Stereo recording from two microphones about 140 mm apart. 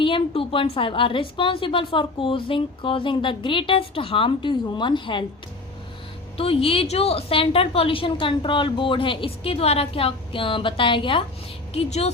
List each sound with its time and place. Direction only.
0.0 s a woman's voice: 40° left (ahead or behind)
6.3 s a woman's voice: 45° left (ahead or behind)
11.7 s a woman's voice: 50° left (ahead or behind)